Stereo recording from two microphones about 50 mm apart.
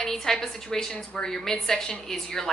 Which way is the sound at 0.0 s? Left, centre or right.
Centre.